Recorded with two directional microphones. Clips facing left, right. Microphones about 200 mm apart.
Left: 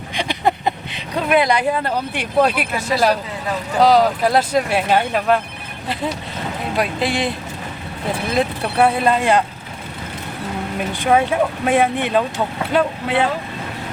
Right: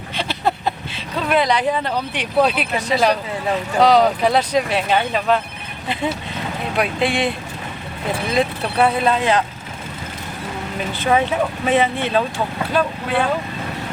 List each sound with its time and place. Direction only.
0.1 s speech: 15° left (ahead or behind)
10.9 s speech: 10° left (ahead or behind)